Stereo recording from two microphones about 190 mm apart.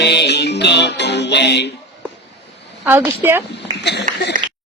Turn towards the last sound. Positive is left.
turn(degrees=-45)  # may be behind; listen again after turning